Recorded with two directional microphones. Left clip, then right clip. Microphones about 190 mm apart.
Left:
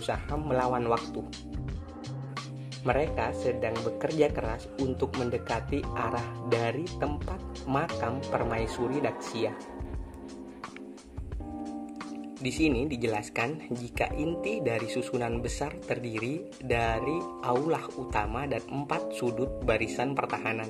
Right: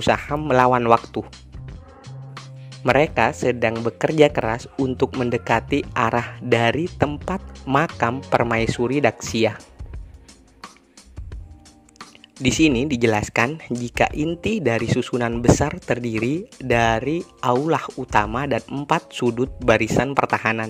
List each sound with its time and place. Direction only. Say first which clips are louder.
0.0 s speech: right 12 dB; 55° right (ahead or behind)
2.8 s speech: right 11 dB; 50° right (ahead or behind)
12.4 s speech: right 10 dB; 50° right (ahead or behind)